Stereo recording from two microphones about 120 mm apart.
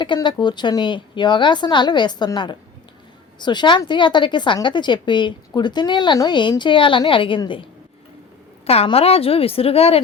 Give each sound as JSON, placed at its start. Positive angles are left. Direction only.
{"t": 0.0, "sound": "a woman's voice", "side_deg": 40}
{"t": 8.6, "sound": "speech", "side_deg": 55}